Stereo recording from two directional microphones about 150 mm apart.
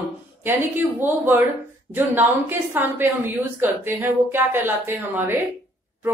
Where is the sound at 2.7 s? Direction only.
15° right (ahead or behind).